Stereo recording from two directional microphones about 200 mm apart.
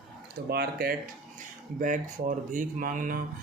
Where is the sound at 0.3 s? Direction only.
50° right (ahead or behind).